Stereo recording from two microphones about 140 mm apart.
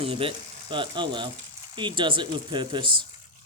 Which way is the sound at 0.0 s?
40° right (ahead or behind).